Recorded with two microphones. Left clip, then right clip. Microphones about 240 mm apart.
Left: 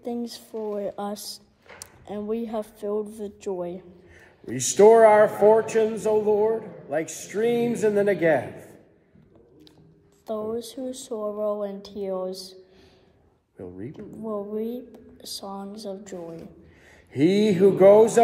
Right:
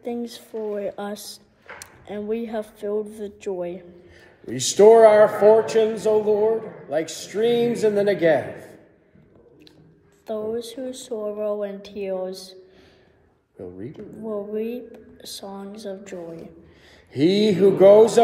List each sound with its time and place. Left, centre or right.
0.0 s speech: centre
4.7 s a man's voice: centre
10.2 s speech: centre
13.6 s a man's voice: centre
14.2 s speech: centre
16.2 s a man's voice: centre